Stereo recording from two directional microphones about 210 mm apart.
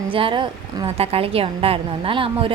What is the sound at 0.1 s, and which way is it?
A woman's voice, 25° right (ahead or behind).